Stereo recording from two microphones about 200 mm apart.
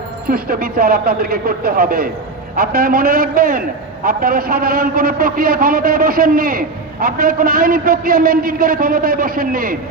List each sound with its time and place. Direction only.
0.3 s a man's voice: 50° right (ahead or behind)